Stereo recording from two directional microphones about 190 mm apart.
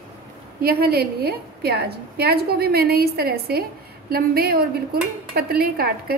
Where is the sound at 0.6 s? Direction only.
55° right (ahead or behind).